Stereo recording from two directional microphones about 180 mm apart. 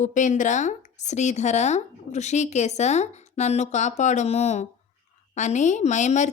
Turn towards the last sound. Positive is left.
turn(degrees=40)  # may be behind; listen again after turning